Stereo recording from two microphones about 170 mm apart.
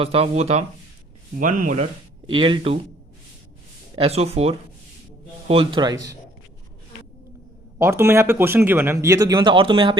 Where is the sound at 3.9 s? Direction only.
35° right (ahead or behind).